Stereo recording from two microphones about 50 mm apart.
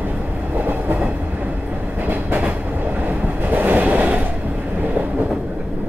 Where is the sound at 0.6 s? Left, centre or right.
Right.